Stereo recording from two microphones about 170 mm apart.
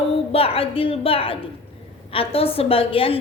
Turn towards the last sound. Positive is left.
turn(degrees=35)  # may be behind; listen again after turning